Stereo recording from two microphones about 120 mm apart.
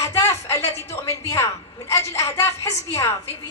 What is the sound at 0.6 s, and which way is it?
Speech, 60° left (ahead or behind).